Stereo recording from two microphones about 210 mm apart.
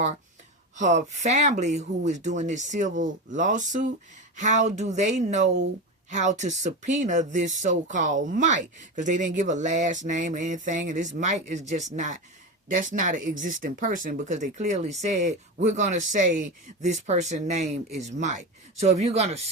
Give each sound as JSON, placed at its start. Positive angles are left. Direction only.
{"t": 0.8, "sound": "speech", "side_deg": -35}